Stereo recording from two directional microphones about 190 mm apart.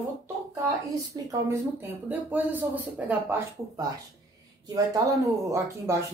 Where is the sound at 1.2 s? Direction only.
20° right (ahead or behind).